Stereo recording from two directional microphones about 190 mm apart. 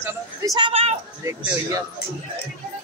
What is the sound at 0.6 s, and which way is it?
Speech, 30° right (ahead or behind).